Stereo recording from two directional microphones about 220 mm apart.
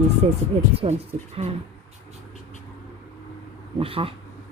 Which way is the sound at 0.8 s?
30° right (ahead or behind).